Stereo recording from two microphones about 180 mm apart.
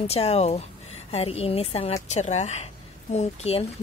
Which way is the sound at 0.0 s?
35° left (ahead or behind).